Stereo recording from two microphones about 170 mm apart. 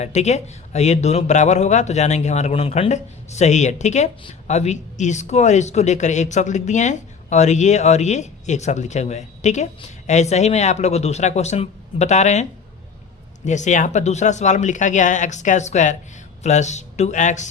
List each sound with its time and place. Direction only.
0.0 s speech: 40° left (ahead or behind)